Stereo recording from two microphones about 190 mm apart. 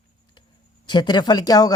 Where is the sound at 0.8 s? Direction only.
25° left (ahead or behind).